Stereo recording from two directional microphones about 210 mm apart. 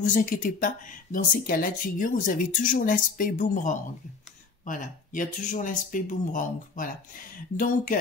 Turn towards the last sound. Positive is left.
turn(degrees=40)  # may be behind; listen again after turning